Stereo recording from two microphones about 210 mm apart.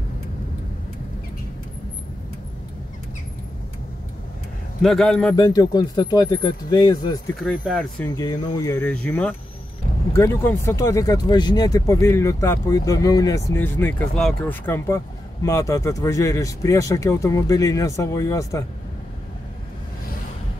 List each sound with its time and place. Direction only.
4.8 s speech: centre (ahead or behind)
5.3 s speech: 20° left (ahead or behind)
7.3 s speech: centre (ahead or behind)
8.1 s speech: 15° left (ahead or behind)